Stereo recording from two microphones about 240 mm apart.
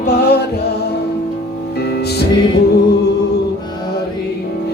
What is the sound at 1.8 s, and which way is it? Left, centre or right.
Music, left.